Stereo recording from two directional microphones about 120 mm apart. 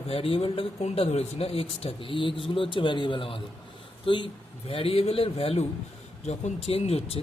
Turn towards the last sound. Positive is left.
turn(degrees=55)  # may be behind; listen again after turning